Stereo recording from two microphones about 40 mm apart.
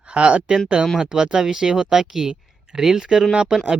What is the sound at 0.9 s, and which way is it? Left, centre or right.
Speech, centre.